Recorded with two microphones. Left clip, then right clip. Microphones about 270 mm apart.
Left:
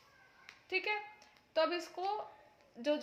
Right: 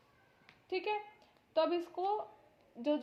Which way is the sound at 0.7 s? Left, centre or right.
Left.